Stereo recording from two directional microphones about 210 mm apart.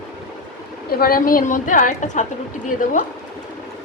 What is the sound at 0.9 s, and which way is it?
A woman's voice, 45° left (ahead or behind).